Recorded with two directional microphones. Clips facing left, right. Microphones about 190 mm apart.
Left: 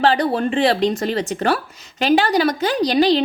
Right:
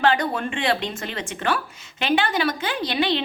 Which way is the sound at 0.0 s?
35° left (ahead or behind).